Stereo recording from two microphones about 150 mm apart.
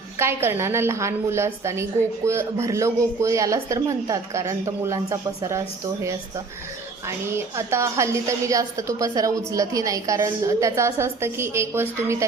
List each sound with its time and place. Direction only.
0.2 s a woman's voice: 15° right (ahead or behind)
7.3 s a woman's voice: 15° right (ahead or behind)